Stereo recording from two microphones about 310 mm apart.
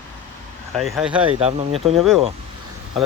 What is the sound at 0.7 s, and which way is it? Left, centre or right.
Speech, centre.